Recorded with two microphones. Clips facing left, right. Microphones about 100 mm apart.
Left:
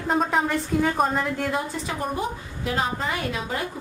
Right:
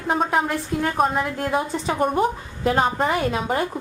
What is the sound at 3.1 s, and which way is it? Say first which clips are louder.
Speech: right 6 dB; 35° right (ahead or behind).